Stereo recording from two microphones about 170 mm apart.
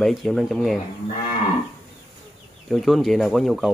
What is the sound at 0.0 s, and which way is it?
Speech, centre (ahead or behind).